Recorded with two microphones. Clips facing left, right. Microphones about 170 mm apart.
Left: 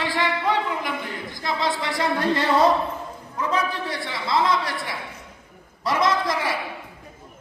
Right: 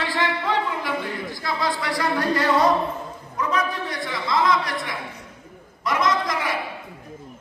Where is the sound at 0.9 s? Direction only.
20° left (ahead or behind).